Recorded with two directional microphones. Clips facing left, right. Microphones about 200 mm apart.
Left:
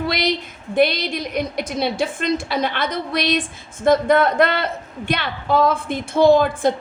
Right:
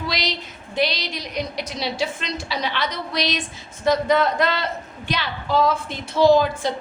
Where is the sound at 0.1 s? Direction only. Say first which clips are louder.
Left 6 dB; 55° left (ahead or behind).